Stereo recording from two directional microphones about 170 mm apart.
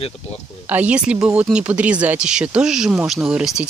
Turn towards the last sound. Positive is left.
turn(degrees=-5)  # may be behind; listen again after turning